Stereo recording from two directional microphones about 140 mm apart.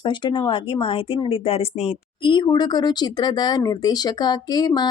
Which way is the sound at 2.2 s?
35° left (ahead or behind).